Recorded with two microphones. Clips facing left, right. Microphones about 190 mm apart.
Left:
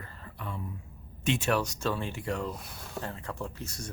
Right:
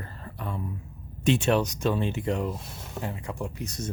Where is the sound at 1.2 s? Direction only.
30° right (ahead or behind).